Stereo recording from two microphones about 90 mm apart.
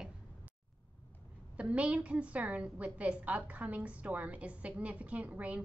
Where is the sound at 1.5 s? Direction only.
15° right (ahead or behind).